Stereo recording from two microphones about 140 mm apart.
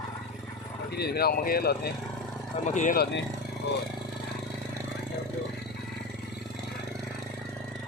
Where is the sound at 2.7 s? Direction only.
60° left (ahead or behind).